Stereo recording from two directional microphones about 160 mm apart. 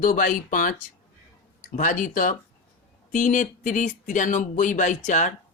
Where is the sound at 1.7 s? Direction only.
55° left (ahead or behind).